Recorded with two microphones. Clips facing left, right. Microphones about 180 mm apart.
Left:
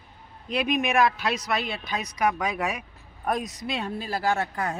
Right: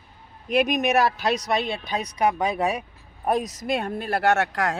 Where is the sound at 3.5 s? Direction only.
50° right (ahead or behind); by 4.8 s 90° right.